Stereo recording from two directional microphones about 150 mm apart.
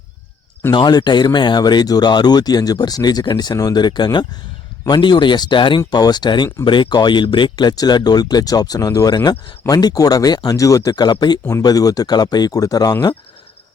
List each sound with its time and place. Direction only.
0.7 s speech: 30° left (ahead or behind)